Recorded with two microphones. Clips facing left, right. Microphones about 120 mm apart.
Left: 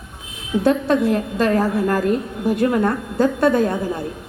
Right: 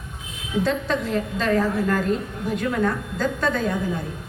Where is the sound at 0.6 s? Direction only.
55° left (ahead or behind).